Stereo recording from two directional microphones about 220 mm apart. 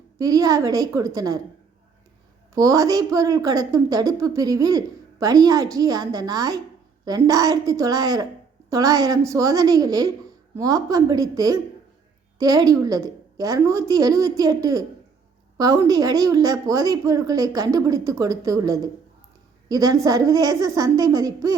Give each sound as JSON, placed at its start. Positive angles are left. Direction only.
{"t": 0.2, "sound": "a woman's voice", "side_deg": -15}
{"t": 2.6, "sound": "a woman's voice", "side_deg": -15}